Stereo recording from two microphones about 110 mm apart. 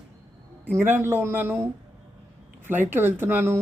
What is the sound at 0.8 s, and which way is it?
A woman's voice, 20° right (ahead or behind).